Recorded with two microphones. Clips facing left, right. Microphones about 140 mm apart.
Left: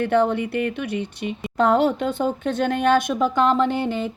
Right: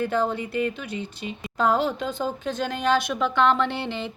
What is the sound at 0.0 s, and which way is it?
Speech, 65° left (ahead or behind).